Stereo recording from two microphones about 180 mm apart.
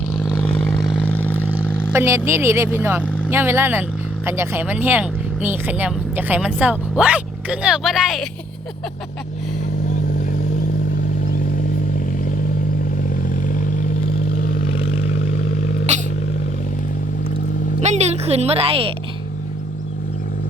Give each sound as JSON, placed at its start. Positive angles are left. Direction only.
{"t": 0.2, "sound": "vehicle", "side_deg": 5}
{"t": 1.0, "sound": "vehicle", "side_deg": 10}
{"t": 1.4, "sound": "speech", "side_deg": -10}
{"t": 15.9, "sound": "vehicle", "side_deg": -40}
{"t": 17.7, "sound": "speech", "side_deg": -40}